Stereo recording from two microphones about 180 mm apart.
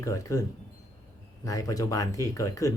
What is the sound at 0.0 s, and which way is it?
Speech, 20° left (ahead or behind).